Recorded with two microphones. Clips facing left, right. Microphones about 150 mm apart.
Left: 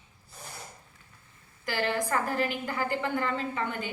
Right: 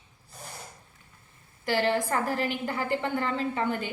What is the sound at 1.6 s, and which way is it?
A woman's voice, 30° right (ahead or behind).